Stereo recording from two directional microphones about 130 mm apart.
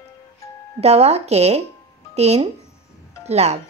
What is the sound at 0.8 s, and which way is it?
Speech, 55° right (ahead or behind).